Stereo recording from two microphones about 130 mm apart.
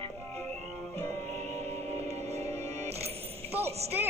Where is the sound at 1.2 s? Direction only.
60° right (ahead or behind).